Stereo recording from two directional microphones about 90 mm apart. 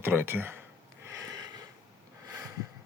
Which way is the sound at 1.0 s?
35° right (ahead or behind).